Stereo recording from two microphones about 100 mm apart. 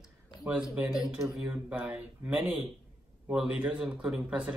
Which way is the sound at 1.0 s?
Centre (ahead or behind).